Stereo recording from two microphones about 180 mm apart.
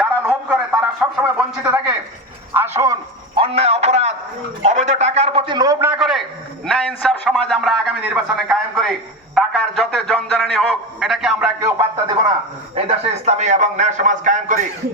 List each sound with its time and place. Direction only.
0.0 s a sound: 5° right (ahead or behind)
1.6 s a man's voice: 10° right (ahead or behind)
2.5 s a sound: 15° right (ahead or behind)
3.3 s a man's voice: 30° right (ahead or behind); by 6.0 s 15° right (ahead or behind)
6.0 s a man's voice: centre (ahead or behind)
12.7 s a man's voice: 35° right (ahead or behind)